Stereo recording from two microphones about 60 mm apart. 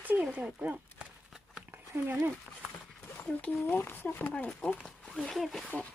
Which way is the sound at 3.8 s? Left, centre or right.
Left.